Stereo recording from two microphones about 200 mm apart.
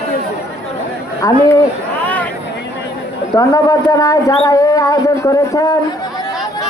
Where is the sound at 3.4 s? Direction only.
15° left (ahead or behind).